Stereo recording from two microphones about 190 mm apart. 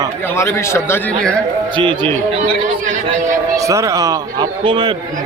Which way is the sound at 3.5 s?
15° right (ahead or behind).